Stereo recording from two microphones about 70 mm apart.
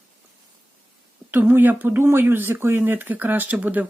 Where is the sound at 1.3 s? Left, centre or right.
Right.